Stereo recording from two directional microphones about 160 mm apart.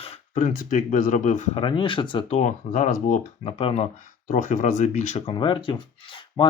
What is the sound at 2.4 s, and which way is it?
Speech, 50° left (ahead or behind).